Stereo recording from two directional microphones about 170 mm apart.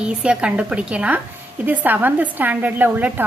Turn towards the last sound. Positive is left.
turn(degrees=-10)  # may be behind; listen again after turning